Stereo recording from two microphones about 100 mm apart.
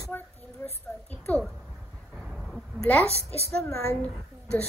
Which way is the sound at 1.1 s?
5° left (ahead or behind).